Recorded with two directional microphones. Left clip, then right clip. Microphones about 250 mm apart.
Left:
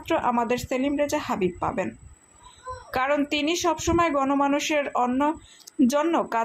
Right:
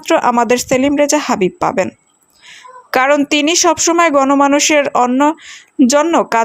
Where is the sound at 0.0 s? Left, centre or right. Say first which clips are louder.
Right 12 dB; right.